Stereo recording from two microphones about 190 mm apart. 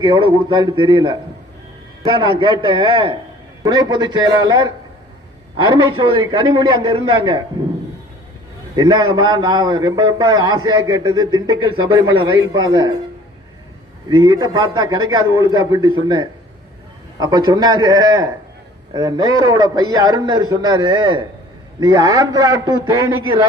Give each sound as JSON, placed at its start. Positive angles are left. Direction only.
{"t": 0.0, "sound": "a man's voice", "side_deg": -25}
{"t": 8.7, "sound": "a man's voice", "side_deg": -25}
{"t": 14.1, "sound": "a man's voice", "side_deg": -20}
{"t": 17.2, "sound": "a man's voice", "side_deg": -20}